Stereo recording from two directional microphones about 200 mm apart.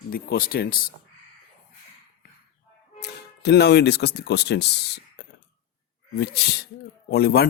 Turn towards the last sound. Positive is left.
turn(degrees=50)  # may be behind; listen again after turning